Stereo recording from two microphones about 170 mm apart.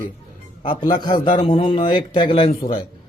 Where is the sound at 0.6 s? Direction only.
30° left (ahead or behind).